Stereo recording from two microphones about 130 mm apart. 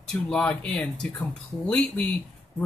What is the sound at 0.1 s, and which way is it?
A man's voice, 5° left (ahead or behind).